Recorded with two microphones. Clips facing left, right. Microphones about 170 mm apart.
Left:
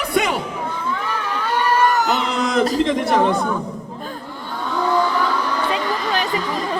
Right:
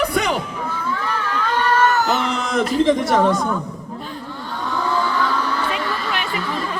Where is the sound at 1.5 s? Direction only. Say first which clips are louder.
Even; 10° left (ahead or behind).